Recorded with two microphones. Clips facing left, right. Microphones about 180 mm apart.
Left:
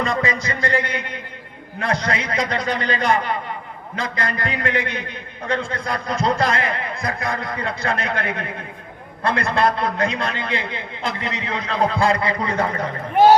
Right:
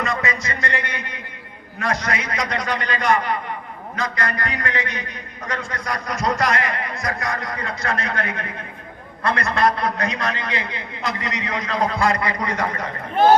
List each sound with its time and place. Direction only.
0.0 s a man's voice: 30° left (ahead or behind)